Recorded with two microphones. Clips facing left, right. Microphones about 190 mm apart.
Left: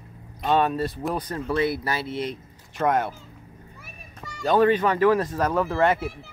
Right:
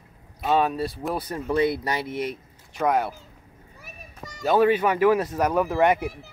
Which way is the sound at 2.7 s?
Centre (ahead or behind).